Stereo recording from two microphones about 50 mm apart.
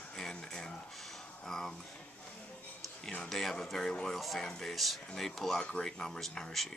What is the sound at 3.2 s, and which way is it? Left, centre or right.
Speech, centre.